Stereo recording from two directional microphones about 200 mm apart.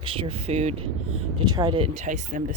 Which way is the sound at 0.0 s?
25° right (ahead or behind).